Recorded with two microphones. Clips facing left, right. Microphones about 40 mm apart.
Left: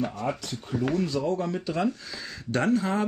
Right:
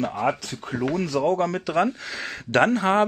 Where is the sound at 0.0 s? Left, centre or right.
Right.